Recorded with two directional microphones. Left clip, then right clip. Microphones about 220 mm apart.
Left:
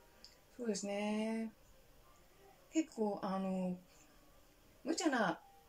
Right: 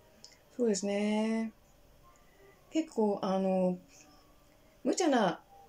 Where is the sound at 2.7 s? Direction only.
20° right (ahead or behind).